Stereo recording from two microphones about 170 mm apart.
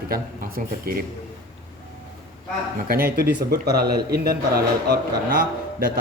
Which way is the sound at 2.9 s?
60° right (ahead or behind).